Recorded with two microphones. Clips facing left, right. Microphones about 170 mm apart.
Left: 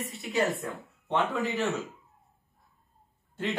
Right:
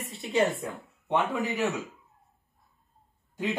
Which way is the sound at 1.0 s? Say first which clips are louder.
Right 1 dB; 15° right (ahead or behind).